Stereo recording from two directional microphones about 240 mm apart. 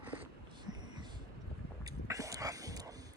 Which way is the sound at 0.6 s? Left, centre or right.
Centre.